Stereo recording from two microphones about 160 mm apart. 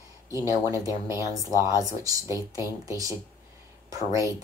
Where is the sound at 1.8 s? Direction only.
20° right (ahead or behind).